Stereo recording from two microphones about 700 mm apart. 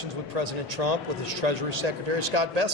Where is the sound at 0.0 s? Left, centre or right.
Right.